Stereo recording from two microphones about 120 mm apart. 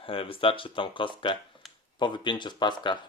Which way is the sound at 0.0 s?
50° left (ahead or behind).